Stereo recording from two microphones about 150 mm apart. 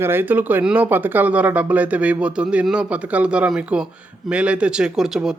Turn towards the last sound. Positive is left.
turn(degrees=-5)  # may be behind; listen again after turning